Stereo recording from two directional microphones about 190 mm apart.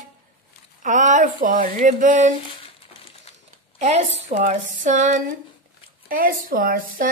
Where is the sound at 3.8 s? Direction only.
35° right (ahead or behind).